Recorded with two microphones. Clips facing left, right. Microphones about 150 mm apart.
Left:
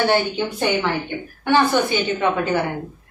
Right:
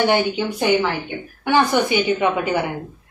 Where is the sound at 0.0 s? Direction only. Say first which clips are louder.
Right 1 dB; 15° right (ahead or behind).